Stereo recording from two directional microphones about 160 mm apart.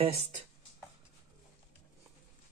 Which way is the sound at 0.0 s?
40° right (ahead or behind).